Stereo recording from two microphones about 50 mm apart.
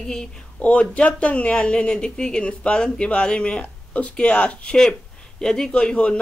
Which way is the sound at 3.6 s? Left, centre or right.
Left.